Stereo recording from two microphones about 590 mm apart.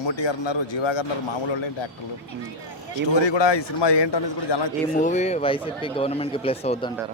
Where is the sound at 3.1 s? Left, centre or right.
Left.